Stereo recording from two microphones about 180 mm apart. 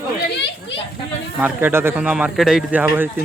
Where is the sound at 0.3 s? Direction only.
70° left (ahead or behind).